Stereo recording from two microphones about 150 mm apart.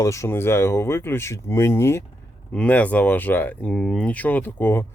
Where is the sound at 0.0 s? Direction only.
20° left (ahead or behind).